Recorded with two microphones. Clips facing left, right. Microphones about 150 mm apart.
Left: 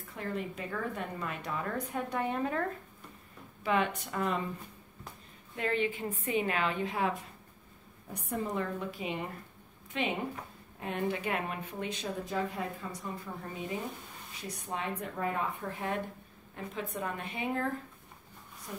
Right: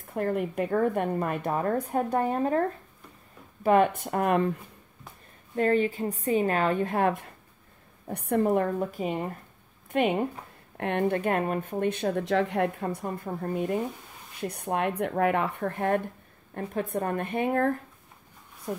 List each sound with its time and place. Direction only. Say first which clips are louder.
0.1 s speech: right 9 dB; 55° right (ahead or behind); by 2.6 s 40° right (ahead or behind)
3.6 s speech: right 9 dB; 45° right (ahead or behind); by 4.6 s 65° right (ahead or behind)
5.6 s speech: right 8 dB; 40° right (ahead or behind)
10.8 s speech: right 8 dB; 65° right (ahead or behind)